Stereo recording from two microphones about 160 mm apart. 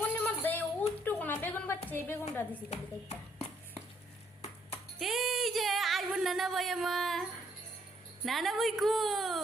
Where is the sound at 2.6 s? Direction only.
40° left (ahead or behind).